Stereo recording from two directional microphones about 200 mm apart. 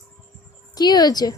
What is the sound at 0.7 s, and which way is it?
Speech, 20° left (ahead or behind).